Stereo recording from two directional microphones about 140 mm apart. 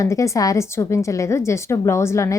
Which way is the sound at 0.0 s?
20° left (ahead or behind).